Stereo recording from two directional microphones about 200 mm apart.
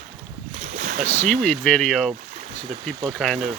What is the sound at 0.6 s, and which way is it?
Boat, 40° right (ahead or behind).